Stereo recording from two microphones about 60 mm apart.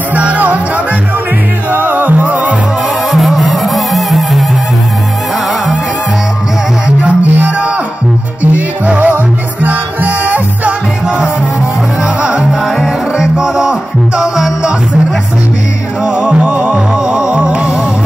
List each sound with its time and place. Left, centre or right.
0.1 s music: right
1.7 s music: right
3.1 s music: centre
7.0 s music: right
12.2 s music: right
16.2 s music: centre